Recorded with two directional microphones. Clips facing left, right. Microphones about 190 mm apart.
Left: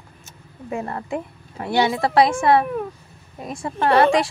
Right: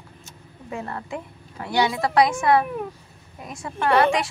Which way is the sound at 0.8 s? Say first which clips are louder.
Left 4 dB; 30° left (ahead or behind).